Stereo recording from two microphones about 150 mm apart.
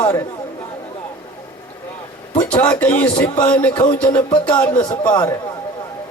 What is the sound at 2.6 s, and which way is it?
Speech, 10° left (ahead or behind).